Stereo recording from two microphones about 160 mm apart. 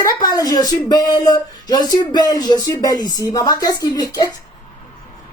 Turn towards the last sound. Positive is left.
turn(degrees=25)  # may be behind; listen again after turning